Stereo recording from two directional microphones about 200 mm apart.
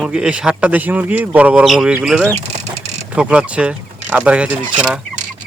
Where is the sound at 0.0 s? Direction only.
5° right (ahead or behind).